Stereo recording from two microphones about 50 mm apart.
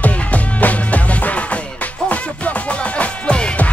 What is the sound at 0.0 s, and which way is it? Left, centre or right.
Music, left.